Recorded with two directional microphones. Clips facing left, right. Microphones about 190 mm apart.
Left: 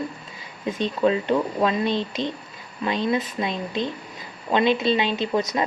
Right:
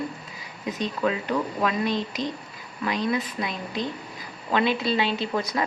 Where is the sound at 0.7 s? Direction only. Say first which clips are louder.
Left 5 dB; 25° left (ahead or behind).